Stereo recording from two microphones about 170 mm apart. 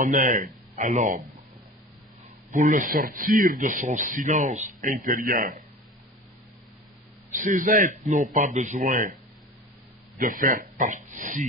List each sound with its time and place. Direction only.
0.0 s speech: 50° right (ahead or behind)
2.5 s a man's voice: 50° right (ahead or behind)
7.3 s speech: 50° right (ahead or behind)
10.1 s speech: 55° right (ahead or behind)